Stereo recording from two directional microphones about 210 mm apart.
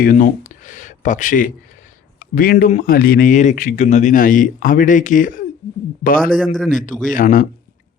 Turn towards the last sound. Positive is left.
turn(degrees=40)  # may be behind; listen again after turning